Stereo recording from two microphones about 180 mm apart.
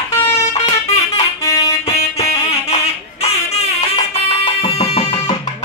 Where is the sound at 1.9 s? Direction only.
35° left (ahead or behind).